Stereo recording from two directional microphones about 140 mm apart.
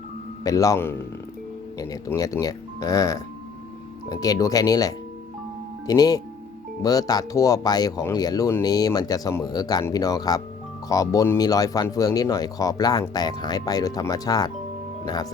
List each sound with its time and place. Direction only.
0.4 s speech: 25° left (ahead or behind)